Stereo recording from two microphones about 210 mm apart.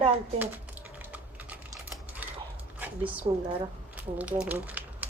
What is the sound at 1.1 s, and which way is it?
Typing, 5° right (ahead or behind).